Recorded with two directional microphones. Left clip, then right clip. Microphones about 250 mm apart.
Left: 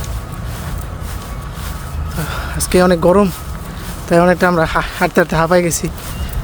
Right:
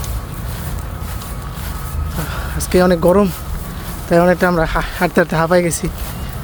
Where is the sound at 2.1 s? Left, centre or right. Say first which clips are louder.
Left 3 dB; centre.